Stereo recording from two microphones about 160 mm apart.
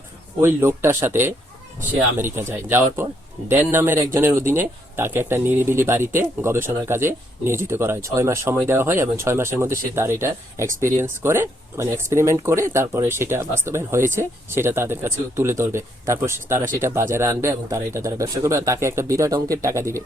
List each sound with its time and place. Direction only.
0.4 s speech: 15° right (ahead or behind)